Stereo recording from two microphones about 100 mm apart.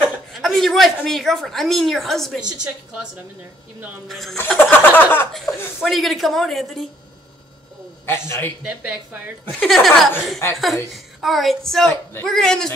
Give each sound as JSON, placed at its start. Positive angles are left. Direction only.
{"t": 0.3, "sound": "a woman's voice", "side_deg": 0}
{"t": 2.5, "sound": "speech", "side_deg": -10}
{"t": 4.1, "sound": "a woman's voice", "side_deg": 0}
{"t": 4.4, "sound": "speech", "side_deg": 20}
{"t": 5.3, "sound": "chuckle", "side_deg": 0}
{"t": 5.8, "sound": "a woman's voice", "side_deg": 0}
{"t": 8.1, "sound": "a man's voice", "side_deg": 25}
{"t": 8.6, "sound": "speech", "side_deg": -15}
{"t": 9.5, "sound": "a woman's voice", "side_deg": 0}
{"t": 11.1, "sound": "a woman's voice", "side_deg": 0}